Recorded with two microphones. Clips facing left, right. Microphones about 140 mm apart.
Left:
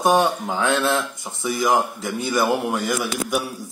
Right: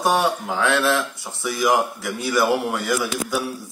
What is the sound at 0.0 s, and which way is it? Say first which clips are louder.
Speech: left 2 dB; 20° left (ahead or behind).